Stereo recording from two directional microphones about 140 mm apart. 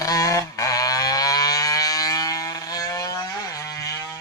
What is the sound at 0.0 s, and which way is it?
Goose, 25° left (ahead or behind).